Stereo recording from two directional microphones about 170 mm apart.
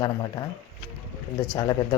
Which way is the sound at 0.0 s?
25° left (ahead or behind).